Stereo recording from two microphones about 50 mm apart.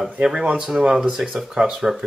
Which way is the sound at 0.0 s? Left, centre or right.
Centre.